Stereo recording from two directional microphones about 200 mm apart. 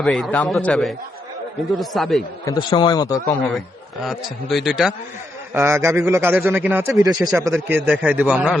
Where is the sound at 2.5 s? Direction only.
25° left (ahead or behind).